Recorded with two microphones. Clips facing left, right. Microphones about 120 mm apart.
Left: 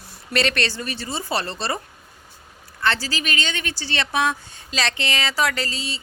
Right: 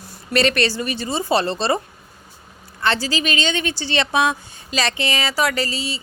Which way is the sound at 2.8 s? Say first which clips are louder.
Right 3 dB; 20° right (ahead or behind).